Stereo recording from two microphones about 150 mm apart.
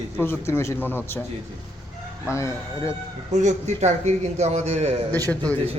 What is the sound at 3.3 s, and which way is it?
A man's voice, 55° right (ahead or behind).